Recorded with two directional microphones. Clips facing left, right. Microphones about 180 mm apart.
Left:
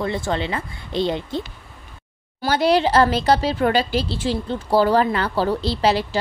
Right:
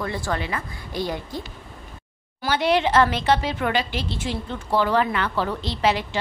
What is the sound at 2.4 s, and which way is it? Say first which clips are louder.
Speech: left 3 dB; 40° left (ahead or behind).